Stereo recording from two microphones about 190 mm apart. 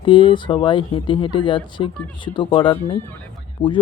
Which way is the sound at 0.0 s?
25° left (ahead or behind).